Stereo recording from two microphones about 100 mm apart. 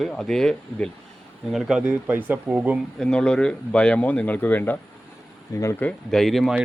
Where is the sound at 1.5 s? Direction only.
5° right (ahead or behind).